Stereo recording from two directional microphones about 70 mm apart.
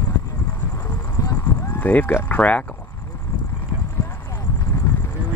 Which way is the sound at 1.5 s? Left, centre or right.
Left.